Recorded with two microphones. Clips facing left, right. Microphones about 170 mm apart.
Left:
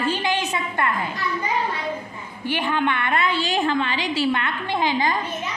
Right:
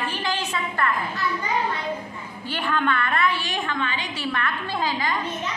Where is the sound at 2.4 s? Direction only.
15° left (ahead or behind).